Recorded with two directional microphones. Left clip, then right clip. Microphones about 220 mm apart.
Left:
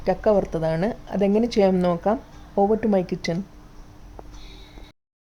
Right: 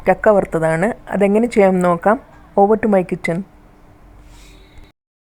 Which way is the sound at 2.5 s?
15° right (ahead or behind).